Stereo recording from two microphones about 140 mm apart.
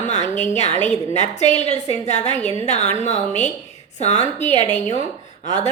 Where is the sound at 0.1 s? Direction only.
55° left (ahead or behind).